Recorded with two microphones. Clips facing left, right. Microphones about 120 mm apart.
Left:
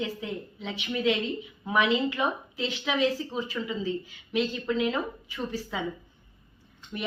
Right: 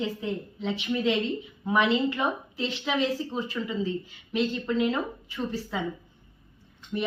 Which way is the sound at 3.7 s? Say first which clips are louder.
Right 1 dB; 10° left (ahead or behind).